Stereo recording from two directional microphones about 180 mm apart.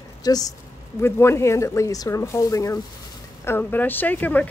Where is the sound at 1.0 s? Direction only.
15° left (ahead or behind).